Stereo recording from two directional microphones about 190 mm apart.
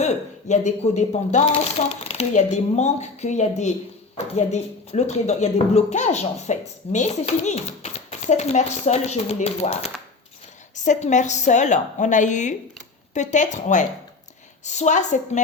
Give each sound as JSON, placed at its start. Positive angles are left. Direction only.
{"t": 0.0, "sound": "speech", "side_deg": 40}